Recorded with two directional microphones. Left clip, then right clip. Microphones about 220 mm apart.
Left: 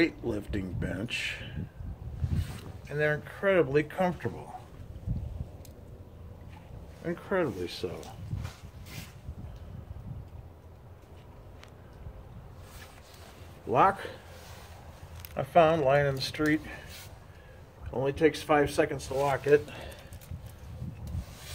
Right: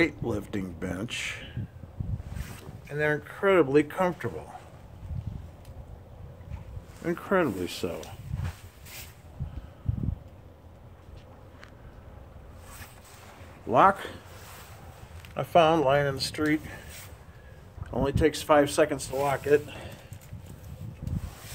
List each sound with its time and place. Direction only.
0.0 s speech: 15° right (ahead or behind)
2.9 s speech: 15° right (ahead or behind)
7.0 s speech: 40° right (ahead or behind)
13.7 s speech: 20° right (ahead or behind)
15.3 s speech: 25° right (ahead or behind)
17.9 s speech: 25° right (ahead or behind)